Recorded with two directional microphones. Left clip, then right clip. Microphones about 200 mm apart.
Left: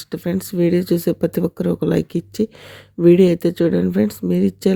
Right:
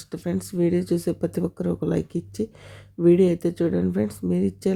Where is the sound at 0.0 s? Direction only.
20° left (ahead or behind).